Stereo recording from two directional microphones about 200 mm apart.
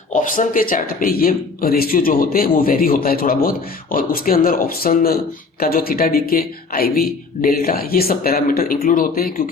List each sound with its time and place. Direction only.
0.1 s speech: 40° left (ahead or behind)